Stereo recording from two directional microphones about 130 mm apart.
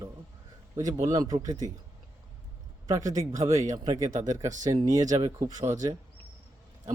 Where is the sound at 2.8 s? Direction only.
25° right (ahead or behind).